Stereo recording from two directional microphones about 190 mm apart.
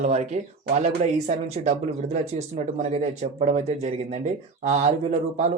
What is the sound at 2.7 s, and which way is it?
Speech, 40° right (ahead or behind).